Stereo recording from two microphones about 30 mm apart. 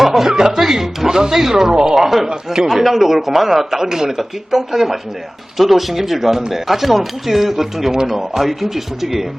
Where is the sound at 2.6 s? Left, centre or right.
Centre.